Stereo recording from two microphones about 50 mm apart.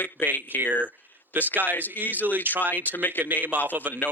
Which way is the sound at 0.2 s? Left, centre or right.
Left.